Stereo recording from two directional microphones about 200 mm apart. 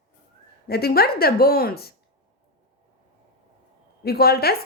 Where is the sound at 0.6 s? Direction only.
50° left (ahead or behind).